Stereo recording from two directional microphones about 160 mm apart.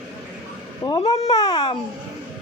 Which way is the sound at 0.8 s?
25° left (ahead or behind).